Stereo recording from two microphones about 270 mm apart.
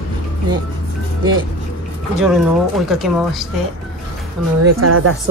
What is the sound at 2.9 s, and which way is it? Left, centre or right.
Speech, centre.